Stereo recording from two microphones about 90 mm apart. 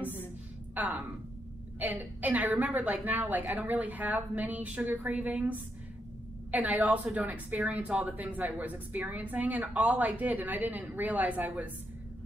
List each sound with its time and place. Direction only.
0.7 s a woman's voice: 15° right (ahead or behind)